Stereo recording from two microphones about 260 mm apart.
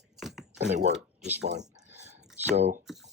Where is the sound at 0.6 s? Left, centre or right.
Right.